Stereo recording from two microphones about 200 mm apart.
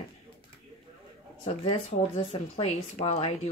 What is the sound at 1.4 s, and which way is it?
Speech, 30° left (ahead or behind).